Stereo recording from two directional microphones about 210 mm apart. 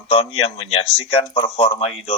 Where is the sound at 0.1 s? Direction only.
25° left (ahead or behind).